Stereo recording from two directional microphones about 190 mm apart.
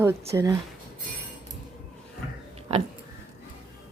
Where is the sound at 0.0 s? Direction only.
15° right (ahead or behind).